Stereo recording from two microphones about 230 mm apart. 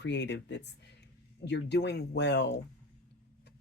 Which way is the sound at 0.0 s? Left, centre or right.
Left.